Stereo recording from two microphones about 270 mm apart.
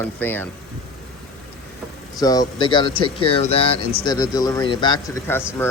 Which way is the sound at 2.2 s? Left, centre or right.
Centre.